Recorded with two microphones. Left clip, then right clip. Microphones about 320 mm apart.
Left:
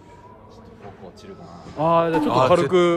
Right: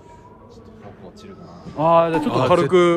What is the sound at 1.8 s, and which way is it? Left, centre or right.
Speech, right.